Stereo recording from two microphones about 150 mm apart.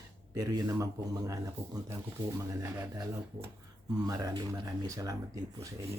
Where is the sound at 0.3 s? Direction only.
25° right (ahead or behind).